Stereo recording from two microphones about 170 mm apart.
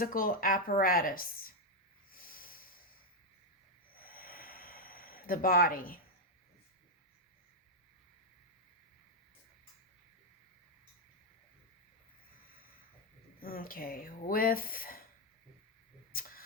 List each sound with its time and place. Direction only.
0.0 s speech: 55° left (ahead or behind)
2.1 s snort: 60° left (ahead or behind)
3.9 s snort: 60° left (ahead or behind)
13.4 s speech: 60° left (ahead or behind)